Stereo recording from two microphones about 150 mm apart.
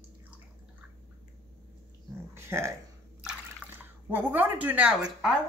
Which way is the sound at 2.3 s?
15° right (ahead or behind).